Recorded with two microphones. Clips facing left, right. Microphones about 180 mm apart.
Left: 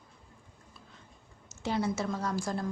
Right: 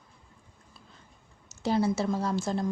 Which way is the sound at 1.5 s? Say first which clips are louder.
Right 5 dB; 35° right (ahead or behind).